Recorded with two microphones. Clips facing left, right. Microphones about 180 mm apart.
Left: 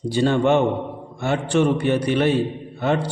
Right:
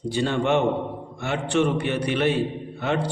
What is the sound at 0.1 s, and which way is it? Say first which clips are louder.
A man's voice: left 4 dB; 35° left (ahead or behind).